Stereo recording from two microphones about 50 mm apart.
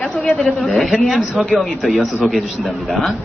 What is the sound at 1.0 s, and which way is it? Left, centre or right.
A man's voice, centre.